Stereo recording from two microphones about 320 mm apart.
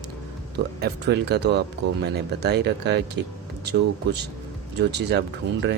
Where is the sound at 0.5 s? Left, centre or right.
Right.